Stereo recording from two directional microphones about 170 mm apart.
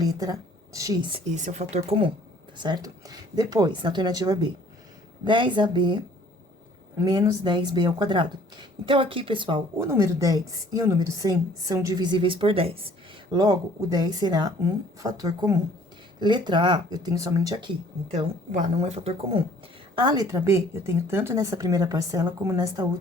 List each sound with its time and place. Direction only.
0.0 s a woman's voice: 20° right (ahead or behind)
1.3 s a woman's voice: 45° right (ahead or behind)
2.6 s a woman's voice: 25° right (ahead or behind)
7.0 s a woman's voice: 20° right (ahead or behind)
9.8 s a woman's voice: 15° right (ahead or behind)
18.1 s a woman's voice: 40° right (ahead or behind)
20.0 s a woman's voice: 25° right (ahead or behind)